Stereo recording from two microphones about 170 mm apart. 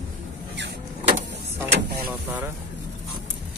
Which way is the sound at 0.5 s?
90° right.